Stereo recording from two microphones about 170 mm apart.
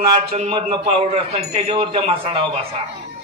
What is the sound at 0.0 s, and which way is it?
A man's voice, 35° right (ahead or behind).